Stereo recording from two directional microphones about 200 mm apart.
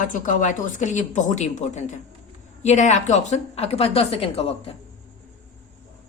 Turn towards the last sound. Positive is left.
turn(degrees=30)  # may be behind; listen again after turning